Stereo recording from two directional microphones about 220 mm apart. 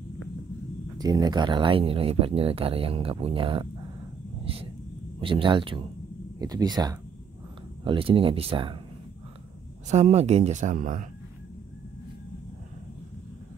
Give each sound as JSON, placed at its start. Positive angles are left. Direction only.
{"t": 0.9, "sound": "speech", "side_deg": -20}
{"t": 5.2, "sound": "speech", "side_deg": -25}
{"t": 9.8, "sound": "speech", "side_deg": -30}